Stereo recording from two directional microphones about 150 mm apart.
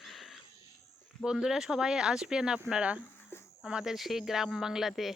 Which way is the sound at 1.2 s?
5° right (ahead or behind).